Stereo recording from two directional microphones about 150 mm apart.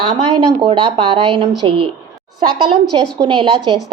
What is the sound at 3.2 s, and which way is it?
Speech, 35° right (ahead or behind).